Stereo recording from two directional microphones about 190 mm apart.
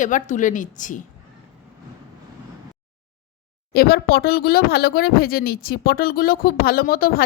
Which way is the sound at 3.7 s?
55° left (ahead or behind).